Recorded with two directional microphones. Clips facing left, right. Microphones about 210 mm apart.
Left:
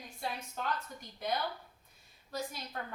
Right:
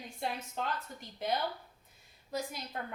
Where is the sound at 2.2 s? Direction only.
20° right (ahead or behind).